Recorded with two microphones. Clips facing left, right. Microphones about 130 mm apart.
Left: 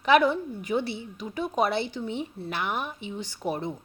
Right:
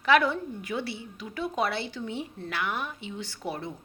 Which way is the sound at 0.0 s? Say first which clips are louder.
Left 2 dB; 20° left (ahead or behind).